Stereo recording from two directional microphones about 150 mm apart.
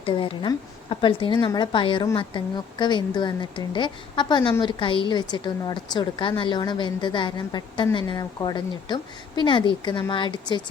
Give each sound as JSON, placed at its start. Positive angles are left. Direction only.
{"t": 0.0, "sound": "speech", "side_deg": 35}